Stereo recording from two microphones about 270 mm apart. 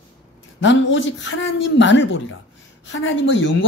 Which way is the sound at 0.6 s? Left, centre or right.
Left.